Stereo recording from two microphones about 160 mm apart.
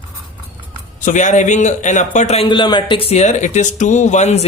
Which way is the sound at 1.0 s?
50° left (ahead or behind).